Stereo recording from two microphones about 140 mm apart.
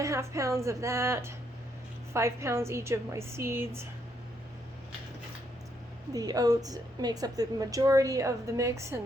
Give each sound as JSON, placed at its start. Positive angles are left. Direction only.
{"t": 0.0, "sound": "a woman's voice", "side_deg": -20}
{"t": 6.1, "sound": "a woman's voice", "side_deg": -25}